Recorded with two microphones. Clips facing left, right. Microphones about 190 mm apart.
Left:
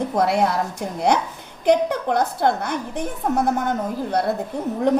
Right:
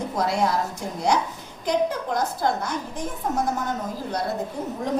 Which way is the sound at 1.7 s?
60° left (ahead or behind).